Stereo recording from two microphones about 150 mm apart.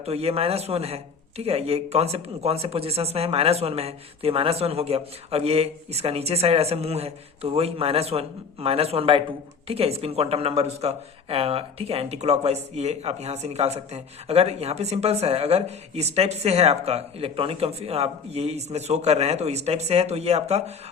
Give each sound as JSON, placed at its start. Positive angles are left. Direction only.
{"t": 0.0, "sound": "speech", "side_deg": -45}